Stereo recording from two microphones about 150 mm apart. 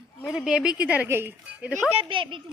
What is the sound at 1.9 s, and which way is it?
Speech, 35° right (ahead or behind).